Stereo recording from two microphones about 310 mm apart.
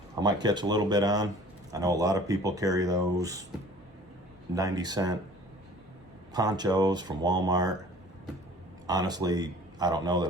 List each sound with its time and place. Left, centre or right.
0.2 s speech: centre
4.5 s speech: centre
6.3 s speech: centre
8.9 s speech: centre